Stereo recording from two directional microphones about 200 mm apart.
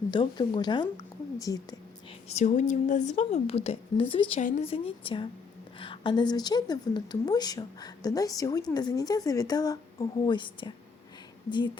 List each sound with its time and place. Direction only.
0.1 s a woman's voice: 25° left (ahead or behind)
2.3 s a woman's voice: 35° left (ahead or behind)